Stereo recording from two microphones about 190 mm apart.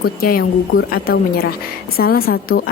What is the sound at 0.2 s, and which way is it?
A woman's voice, 50° left (ahead or behind).